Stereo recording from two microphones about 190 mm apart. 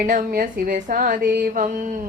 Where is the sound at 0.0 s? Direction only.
50° right (ahead or behind).